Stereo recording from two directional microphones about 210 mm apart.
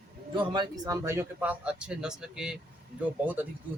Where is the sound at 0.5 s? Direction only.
20° right (ahead or behind).